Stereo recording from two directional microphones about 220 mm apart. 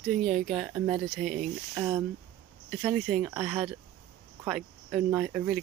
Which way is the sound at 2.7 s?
Centre (ahead or behind).